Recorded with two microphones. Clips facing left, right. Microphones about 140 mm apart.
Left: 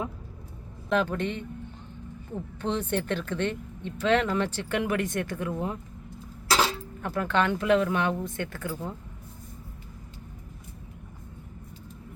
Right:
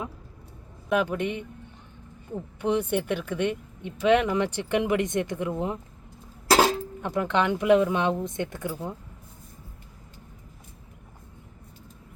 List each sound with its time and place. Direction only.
0.9 s speech: 10° right (ahead or behind)
6.5 s a sound: 40° right (ahead or behind)
7.0 s speech: 20° right (ahead or behind)